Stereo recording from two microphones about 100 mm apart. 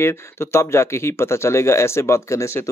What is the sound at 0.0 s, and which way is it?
Speech, 25° left (ahead or behind).